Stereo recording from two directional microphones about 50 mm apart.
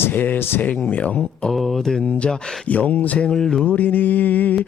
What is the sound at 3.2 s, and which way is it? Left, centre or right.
Music, centre.